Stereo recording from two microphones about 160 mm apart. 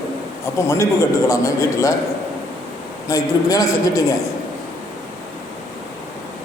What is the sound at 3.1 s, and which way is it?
Speech, 20° left (ahead or behind).